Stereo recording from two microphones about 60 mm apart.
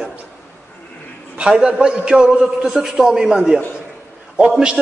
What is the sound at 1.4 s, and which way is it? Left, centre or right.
A man's voice, centre.